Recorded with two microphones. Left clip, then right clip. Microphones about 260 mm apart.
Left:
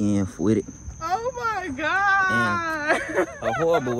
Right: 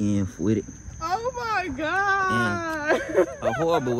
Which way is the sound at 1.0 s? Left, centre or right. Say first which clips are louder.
Left 2 dB; right.